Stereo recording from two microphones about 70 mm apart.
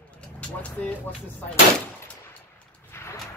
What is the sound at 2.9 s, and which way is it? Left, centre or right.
Sliding door, left.